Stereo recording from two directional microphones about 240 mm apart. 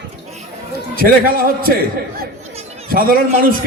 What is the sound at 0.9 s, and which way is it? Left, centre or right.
Speech, right.